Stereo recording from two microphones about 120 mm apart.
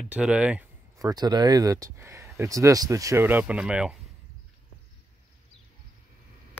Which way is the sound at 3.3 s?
15° right (ahead or behind).